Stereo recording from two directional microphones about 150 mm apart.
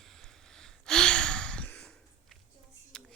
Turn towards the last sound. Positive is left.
turn(degrees=5)  # may be behind; listen again after turning